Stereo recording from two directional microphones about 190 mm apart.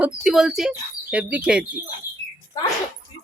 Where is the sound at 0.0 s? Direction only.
Centre (ahead or behind).